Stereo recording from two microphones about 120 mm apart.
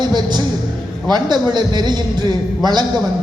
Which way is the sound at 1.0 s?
35° right (ahead or behind).